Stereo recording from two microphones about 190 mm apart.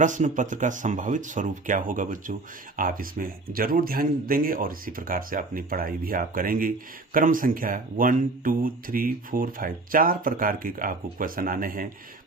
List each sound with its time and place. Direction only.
0.0 s speech: 40° right (ahead or behind)